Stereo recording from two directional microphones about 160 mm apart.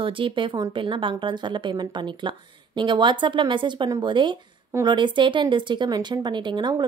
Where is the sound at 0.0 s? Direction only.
30° right (ahead or behind).